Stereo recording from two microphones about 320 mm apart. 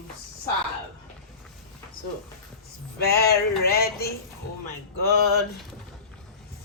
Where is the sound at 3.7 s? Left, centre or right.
Left.